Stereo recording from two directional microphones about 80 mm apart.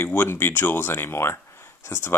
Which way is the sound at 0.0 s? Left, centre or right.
Left.